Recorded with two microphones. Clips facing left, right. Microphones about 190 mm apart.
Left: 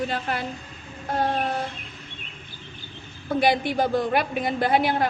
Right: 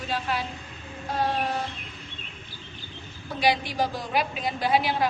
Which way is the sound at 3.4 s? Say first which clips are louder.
Left 3 dB; 55° left (ahead or behind).